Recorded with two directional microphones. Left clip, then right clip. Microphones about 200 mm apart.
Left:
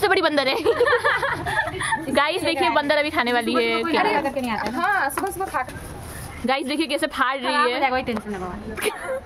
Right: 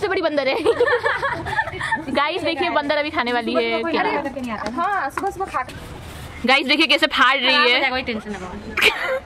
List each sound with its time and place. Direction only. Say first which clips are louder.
0.0 s a woman's voice: left 1 dB; 10° left (ahead or behind)
6.4 s a woman's voice: right 7 dB; 5° right (ahead or behind)
7.8 s a woman's voice: even; 55° left (ahead or behind)
8.7 s a woman's voice: right 9 dB; 5° right (ahead or behind)